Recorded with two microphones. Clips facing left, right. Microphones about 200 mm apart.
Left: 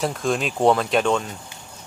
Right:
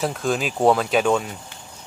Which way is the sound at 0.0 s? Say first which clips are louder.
Even; centre (ahead or behind).